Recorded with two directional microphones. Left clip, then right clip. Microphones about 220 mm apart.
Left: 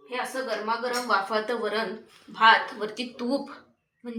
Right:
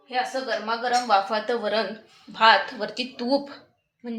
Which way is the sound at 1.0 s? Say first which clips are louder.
Right 3 dB; 65° right (ahead or behind).